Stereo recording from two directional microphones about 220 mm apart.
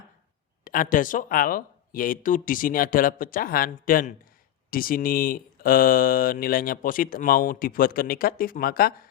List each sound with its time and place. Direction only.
0.6 s speech: 40° left (ahead or behind)